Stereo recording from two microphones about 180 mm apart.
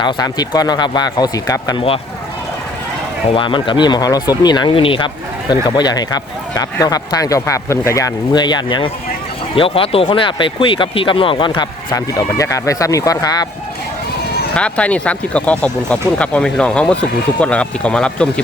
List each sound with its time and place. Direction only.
0.0 s speech: 20° left (ahead or behind)
3.3 s speech: 25° left (ahead or behind)
14.5 s speech: 5° left (ahead or behind)